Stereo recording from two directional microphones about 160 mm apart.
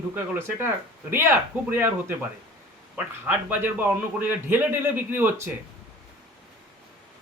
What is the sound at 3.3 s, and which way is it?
A man's voice, 10° right (ahead or behind).